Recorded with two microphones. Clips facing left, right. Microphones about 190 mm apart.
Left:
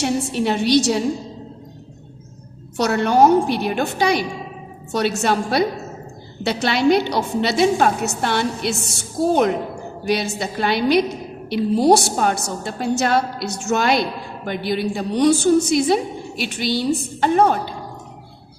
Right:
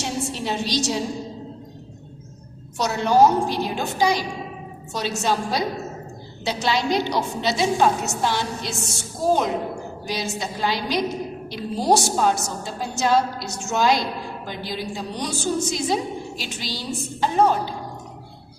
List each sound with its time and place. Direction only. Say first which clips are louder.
0.0 s a woman's voice: left 7 dB; 60° left (ahead or behind)
2.7 s a woman's voice: left 2 dB; 60° left (ahead or behind)
10.1 s a woman's voice: left 7 dB; 65° left (ahead or behind)